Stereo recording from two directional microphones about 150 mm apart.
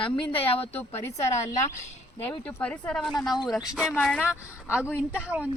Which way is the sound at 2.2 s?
10° left (ahead or behind).